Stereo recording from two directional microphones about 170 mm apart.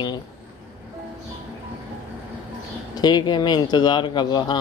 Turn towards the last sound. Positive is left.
turn(degrees=25)  # may be behind; listen again after turning